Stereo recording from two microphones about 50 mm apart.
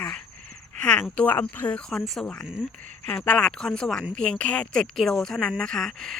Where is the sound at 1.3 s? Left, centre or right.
Left.